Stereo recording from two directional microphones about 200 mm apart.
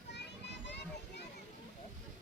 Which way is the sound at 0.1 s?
60° left (ahead or behind).